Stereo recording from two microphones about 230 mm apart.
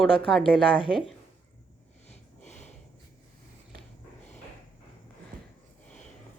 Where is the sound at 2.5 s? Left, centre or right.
Left.